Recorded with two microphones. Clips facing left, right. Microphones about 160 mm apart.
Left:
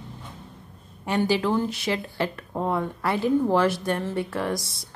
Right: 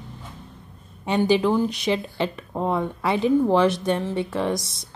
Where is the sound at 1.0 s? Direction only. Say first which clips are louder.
Right 3 dB; 20° right (ahead or behind).